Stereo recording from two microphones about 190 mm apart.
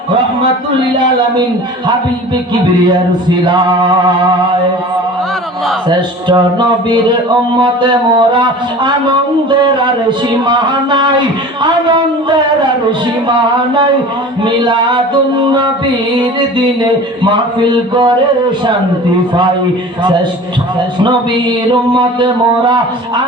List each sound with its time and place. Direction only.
6.2 s speech: 25° right (ahead or behind)
14.4 s speech: 25° right (ahead or behind)